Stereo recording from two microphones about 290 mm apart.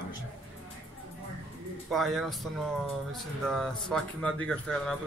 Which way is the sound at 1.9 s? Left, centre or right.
Centre.